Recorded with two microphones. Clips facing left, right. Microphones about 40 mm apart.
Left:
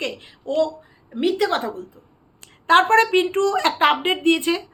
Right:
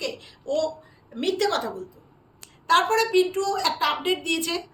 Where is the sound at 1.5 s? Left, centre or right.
Left.